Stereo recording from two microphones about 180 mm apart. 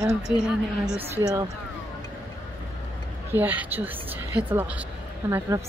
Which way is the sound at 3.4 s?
10° right (ahead or behind).